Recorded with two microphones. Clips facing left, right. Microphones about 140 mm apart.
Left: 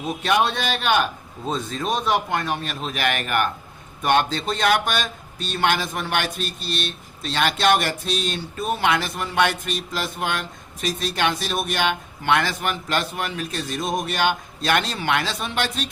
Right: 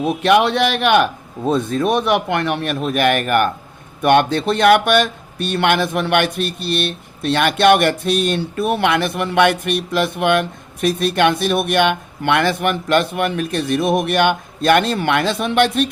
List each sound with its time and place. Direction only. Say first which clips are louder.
0.0 s a man's voice: right 7 dB; 60° right (ahead or behind)